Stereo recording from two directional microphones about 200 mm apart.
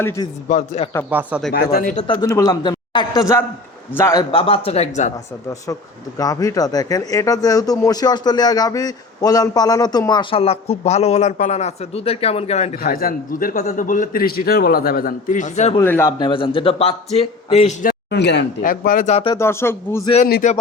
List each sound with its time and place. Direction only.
0.0 s speech: 15° left (ahead or behind)
0.4 s a man's voice: 35° left (ahead or behind)
1.1 s speech: 5° right (ahead or behind)
1.5 s a man's voice: 50° left (ahead or behind)
2.0 s speech: 20° left (ahead or behind)
6.1 s speech: 15° left (ahead or behind)
12.7 s a man's voice: 45° left (ahead or behind)
15.8 s speech: 10° left (ahead or behind); by 17.7 s 30° left (ahead or behind)
17.8 s a man's voice: 55° left (ahead or behind); by 19.3 s 35° left (ahead or behind)
19.3 s speech: 15° left (ahead or behind)
20.2 s a man's voice: 50° left (ahead or behind)